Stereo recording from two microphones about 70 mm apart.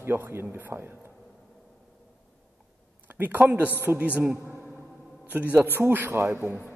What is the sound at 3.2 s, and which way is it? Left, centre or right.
A man's voice, right.